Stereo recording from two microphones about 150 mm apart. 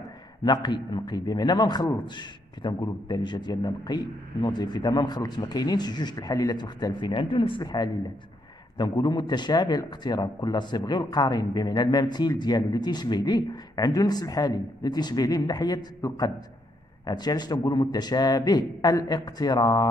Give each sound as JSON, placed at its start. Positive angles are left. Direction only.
{"t": 0.4, "sound": "a man's voice", "side_deg": 30}